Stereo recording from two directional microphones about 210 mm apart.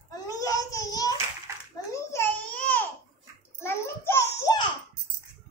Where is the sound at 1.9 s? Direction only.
15° left (ahead or behind).